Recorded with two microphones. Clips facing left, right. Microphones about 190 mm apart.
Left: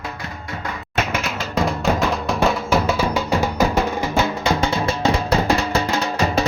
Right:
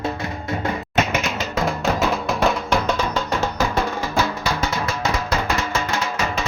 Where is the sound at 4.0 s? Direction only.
25° left (ahead or behind).